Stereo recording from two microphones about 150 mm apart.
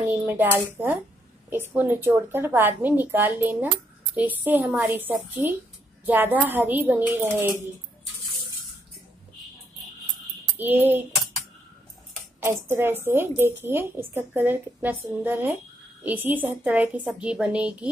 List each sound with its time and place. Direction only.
0.1 s a woman's voice: 10° right (ahead or behind)
10.6 s a woman's voice: 15° right (ahead or behind)
12.4 s a woman's voice: 15° right (ahead or behind)